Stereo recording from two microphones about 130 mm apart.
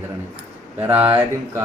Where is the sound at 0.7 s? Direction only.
15° right (ahead or behind).